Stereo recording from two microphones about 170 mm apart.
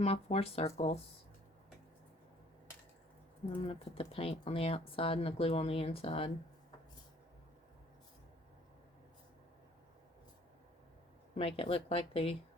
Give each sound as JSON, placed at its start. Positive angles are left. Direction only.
{"t": 0.0, "sound": "speech", "side_deg": 35}
{"t": 3.5, "sound": "speech", "side_deg": 35}
{"t": 11.3, "sound": "speech", "side_deg": 35}